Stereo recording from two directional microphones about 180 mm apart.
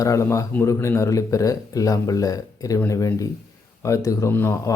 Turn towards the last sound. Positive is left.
turn(degrees=15)  # may be behind; listen again after turning